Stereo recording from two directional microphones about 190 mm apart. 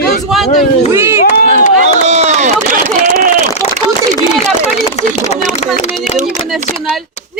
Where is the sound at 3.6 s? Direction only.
35° left (ahead or behind).